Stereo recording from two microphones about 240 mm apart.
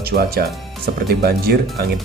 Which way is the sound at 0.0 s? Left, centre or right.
Right.